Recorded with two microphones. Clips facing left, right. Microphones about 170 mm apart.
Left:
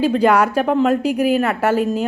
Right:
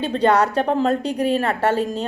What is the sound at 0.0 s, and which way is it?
Speech, 30° right (ahead or behind).